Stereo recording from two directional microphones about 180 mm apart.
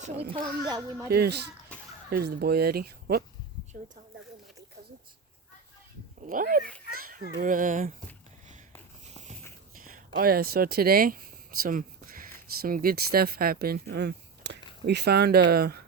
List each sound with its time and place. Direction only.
0.0 s a child's voice: 35° right (ahead or behind)
0.7 s speech: 15° right (ahead or behind)
1.1 s speech: 65° right (ahead or behind)
6.2 s speech: 50° right (ahead or behind)
6.9 s a sound: 55° right (ahead or behind)
7.4 s speech: 45° right (ahead or behind)
9.8 s speech: 55° right (ahead or behind)